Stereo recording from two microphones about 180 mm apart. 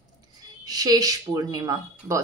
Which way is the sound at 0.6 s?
20° right (ahead or behind).